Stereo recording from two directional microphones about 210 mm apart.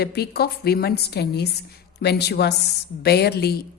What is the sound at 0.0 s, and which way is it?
A woman's voice, 50° left (ahead or behind).